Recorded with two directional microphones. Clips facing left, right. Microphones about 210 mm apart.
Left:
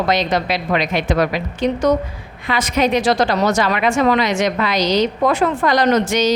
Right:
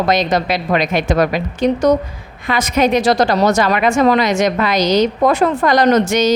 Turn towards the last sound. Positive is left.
turn(degrees=-45)  # may be behind; listen again after turning